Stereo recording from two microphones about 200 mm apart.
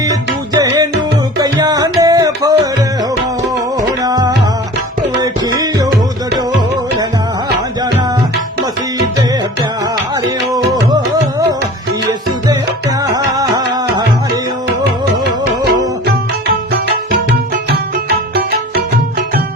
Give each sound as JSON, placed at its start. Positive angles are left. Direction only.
{"t": 0.5, "sound": "music", "side_deg": -15}
{"t": 3.8, "sound": "music", "side_deg": -20}
{"t": 9.8, "sound": "music", "side_deg": -20}
{"t": 13.0, "sound": "music", "side_deg": -20}
{"t": 17.1, "sound": "music", "side_deg": -55}